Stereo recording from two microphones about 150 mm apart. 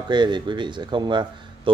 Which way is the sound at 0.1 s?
30° right (ahead or behind).